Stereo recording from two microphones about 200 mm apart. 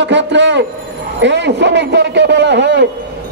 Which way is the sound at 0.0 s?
65° right (ahead or behind).